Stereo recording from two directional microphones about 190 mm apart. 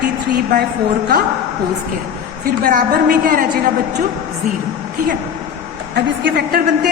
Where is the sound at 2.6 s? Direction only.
50° right (ahead or behind).